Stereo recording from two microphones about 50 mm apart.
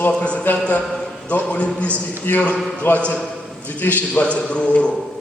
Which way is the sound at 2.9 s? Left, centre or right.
Left.